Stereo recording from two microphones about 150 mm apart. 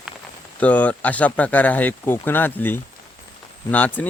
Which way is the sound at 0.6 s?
10° left (ahead or behind).